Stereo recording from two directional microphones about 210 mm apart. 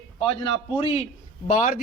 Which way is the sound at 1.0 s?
35° left (ahead or behind).